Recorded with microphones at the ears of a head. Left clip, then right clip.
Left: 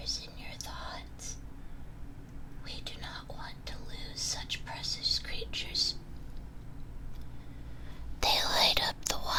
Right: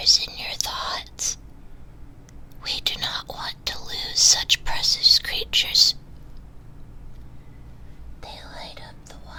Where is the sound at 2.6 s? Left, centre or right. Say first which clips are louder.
Right 18 dB; right.